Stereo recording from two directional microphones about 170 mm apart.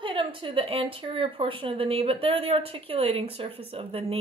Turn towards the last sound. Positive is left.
turn(degrees=-35)  # may be behind; listen again after turning